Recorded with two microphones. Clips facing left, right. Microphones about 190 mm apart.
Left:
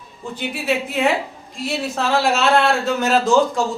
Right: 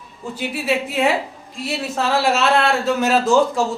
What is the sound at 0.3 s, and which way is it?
A man's voice, 5° right (ahead or behind).